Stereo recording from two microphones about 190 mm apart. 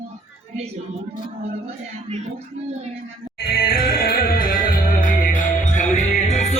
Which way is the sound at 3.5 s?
50° left (ahead or behind).